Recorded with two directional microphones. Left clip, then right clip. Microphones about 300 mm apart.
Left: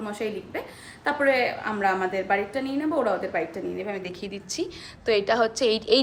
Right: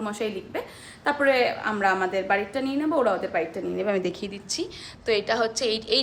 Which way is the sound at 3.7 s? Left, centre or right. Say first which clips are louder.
Right 6 dB; centre.